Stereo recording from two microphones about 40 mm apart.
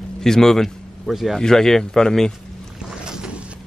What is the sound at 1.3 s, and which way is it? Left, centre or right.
Speech, centre.